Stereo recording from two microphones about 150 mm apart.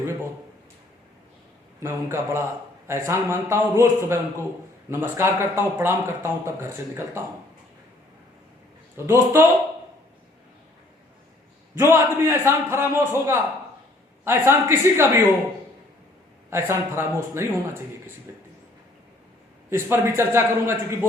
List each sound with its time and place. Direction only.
1.8 s speech: 15° right (ahead or behind)
9.0 s speech: 20° right (ahead or behind)
11.7 s speech: 15° right (ahead or behind)
16.5 s speech: 15° right (ahead or behind)
19.7 s speech: 15° right (ahead or behind)